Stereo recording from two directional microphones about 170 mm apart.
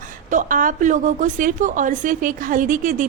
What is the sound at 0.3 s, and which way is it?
A woman's voice, 50° right (ahead or behind).